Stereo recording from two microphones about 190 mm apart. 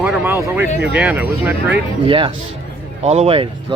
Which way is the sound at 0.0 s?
10° right (ahead or behind).